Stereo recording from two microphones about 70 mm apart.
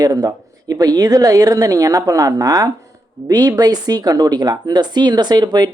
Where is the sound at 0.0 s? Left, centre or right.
Right.